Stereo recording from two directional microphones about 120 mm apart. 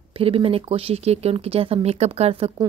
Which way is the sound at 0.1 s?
50° right (ahead or behind).